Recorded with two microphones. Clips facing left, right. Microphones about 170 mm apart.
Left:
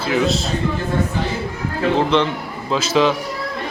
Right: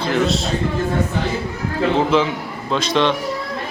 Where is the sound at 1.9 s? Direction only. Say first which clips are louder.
Even; 5° right (ahead or behind).